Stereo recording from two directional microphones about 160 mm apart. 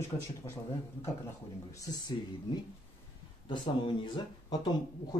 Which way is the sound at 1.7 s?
25° left (ahead or behind).